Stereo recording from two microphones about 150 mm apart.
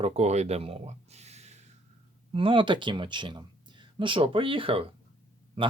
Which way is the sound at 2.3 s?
35° right (ahead or behind).